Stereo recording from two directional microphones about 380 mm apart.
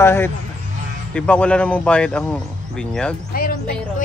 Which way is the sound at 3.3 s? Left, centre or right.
Left.